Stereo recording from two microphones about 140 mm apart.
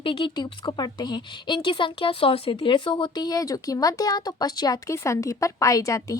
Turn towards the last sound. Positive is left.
turn(degrees=25)  # may be behind; listen again after turning